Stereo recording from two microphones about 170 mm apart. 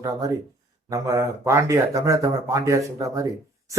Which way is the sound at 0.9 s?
20° right (ahead or behind).